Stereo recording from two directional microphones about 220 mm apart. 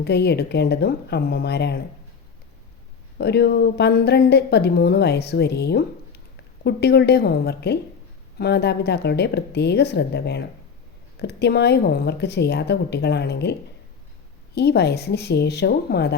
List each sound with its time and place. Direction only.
0.0 s speech: 50° left (ahead or behind)
3.2 s speech: 50° left (ahead or behind)